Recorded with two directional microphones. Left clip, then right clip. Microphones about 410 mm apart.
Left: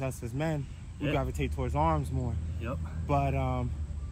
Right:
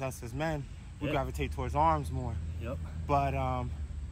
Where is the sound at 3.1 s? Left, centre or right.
Centre.